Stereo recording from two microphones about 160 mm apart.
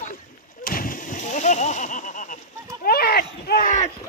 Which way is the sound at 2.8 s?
75° left (ahead or behind).